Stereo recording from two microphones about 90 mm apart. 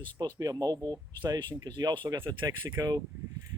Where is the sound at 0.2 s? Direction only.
45° right (ahead or behind).